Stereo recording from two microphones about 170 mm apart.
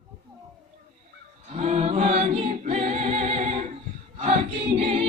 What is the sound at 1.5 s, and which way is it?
A capella, 40° right (ahead or behind).